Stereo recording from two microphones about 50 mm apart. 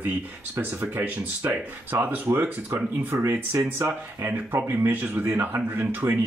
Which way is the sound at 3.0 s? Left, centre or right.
Right.